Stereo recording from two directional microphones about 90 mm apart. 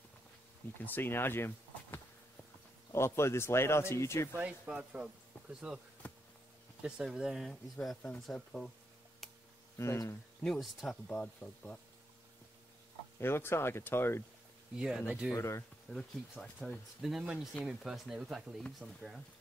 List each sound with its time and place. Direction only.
0.8 s speech: 20° left (ahead or behind)
4.5 s speech: 10° right (ahead or behind)
6.0 s a sound: 15° left (ahead or behind)
6.8 s speech: 10° right (ahead or behind); by 8.6 s 10° left (ahead or behind)
9.2 s a sound: centre (ahead or behind)
9.8 s speech: 30° left (ahead or behind)
10.4 s speech: centre (ahead or behind)
11.1 s speech: 10° left (ahead or behind)
13.2 s speech: 25° left (ahead or behind)
14.8 s speech: 10° right (ahead or behind)
15.3 s speech: 35° left (ahead or behind)
15.9 s speech: 5° left (ahead or behind)